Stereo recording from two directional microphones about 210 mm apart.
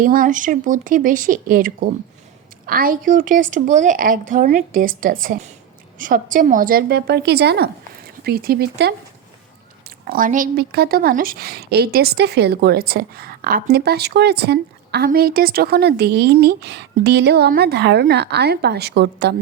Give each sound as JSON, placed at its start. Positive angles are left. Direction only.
{"t": 0.0, "sound": "a woman's voice", "side_deg": -40}
{"t": 10.1, "sound": "a woman's voice", "side_deg": -40}